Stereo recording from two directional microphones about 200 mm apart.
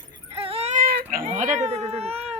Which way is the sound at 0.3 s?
30° right (ahead or behind).